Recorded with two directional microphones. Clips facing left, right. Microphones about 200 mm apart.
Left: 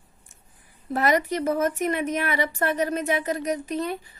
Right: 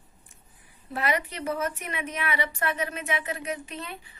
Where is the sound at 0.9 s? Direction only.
45° left (ahead or behind).